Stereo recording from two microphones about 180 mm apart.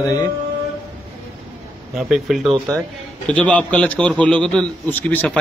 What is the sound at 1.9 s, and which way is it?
Speech, centre (ahead or behind).